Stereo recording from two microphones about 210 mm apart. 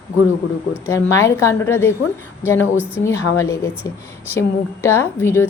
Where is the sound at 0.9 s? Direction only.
15° left (ahead or behind).